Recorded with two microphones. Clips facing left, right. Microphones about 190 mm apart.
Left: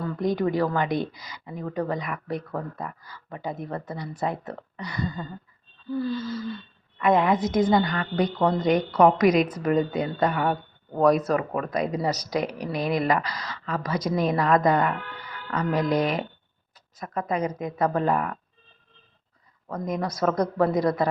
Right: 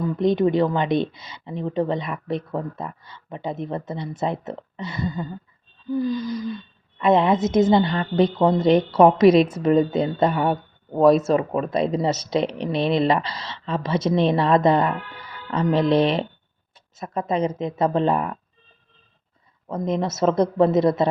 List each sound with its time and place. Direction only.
0.0 s a woman's voice: 20° right (ahead or behind)
5.9 s a sound: 15° right (ahead or behind)
7.0 s a woman's voice: 25° right (ahead or behind)
19.6 s a woman's voice: 25° right (ahead or behind)